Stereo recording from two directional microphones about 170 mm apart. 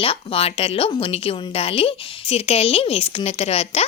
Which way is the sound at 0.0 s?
35° left (ahead or behind).